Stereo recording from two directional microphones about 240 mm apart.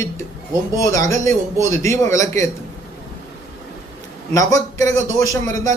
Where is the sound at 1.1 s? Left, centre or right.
Centre.